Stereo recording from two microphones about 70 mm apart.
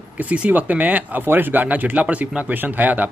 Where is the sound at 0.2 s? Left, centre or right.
Right.